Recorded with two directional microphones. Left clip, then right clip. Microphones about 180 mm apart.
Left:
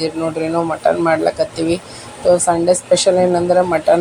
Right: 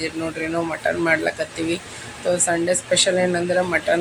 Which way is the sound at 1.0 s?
15° left (ahead or behind).